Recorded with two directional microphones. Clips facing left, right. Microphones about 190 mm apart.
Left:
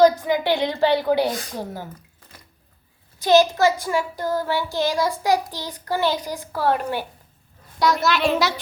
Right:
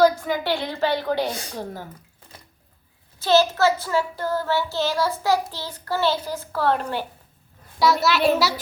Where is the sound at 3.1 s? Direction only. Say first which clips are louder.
Left 2 dB; 15° left (ahead or behind).